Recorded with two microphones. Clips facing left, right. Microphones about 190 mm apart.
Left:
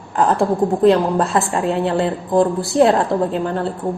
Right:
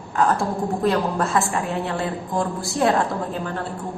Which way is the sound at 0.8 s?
30° left (ahead or behind).